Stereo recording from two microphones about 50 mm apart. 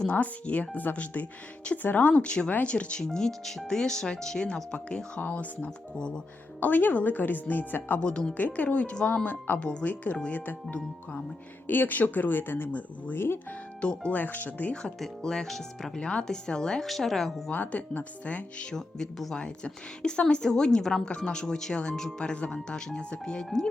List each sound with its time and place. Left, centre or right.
0.1 s speech: left
3.0 s speech: centre
6.6 s speech: left
13.1 s speech: left
14.1 s speech: left
14.7 s speech: left
16.0 s speech: centre
16.8 s speech: centre
17.5 s speech: left
18.7 s speech: centre